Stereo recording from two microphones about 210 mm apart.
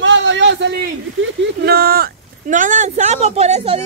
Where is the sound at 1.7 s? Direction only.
45° right (ahead or behind).